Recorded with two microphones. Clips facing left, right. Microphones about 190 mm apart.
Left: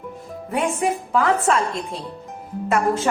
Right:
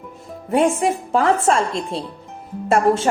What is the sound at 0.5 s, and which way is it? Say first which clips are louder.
A woman's voice: right 5 dB; 30° right (ahead or behind).